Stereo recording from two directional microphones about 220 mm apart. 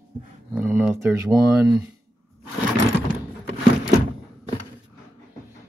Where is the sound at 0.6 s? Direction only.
5° right (ahead or behind).